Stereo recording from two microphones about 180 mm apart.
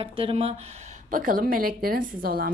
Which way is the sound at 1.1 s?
50° right (ahead or behind).